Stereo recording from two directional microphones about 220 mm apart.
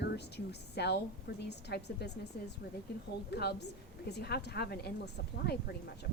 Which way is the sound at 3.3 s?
50° left (ahead or behind).